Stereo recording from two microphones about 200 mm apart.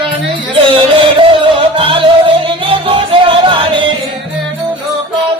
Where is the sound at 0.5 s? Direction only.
25° right (ahead or behind).